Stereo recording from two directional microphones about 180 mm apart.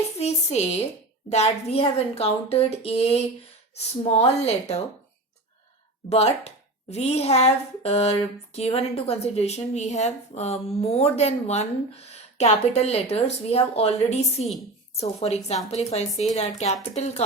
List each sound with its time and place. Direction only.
0.2 s a woman's voice: 35° left (ahead or behind)
6.1 s speech: 35° left (ahead or behind)